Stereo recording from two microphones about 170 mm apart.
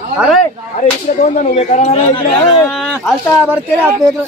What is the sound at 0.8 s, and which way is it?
Speech, 50° left (ahead or behind).